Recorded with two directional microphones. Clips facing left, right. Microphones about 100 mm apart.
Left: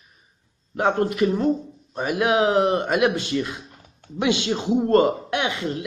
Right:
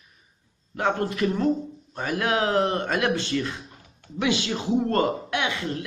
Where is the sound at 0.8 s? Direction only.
20° left (ahead or behind).